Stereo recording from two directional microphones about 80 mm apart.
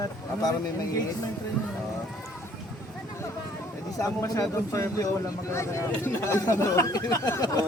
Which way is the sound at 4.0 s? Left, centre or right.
Left.